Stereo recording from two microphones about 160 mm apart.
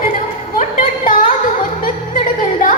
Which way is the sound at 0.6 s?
60° left (ahead or behind).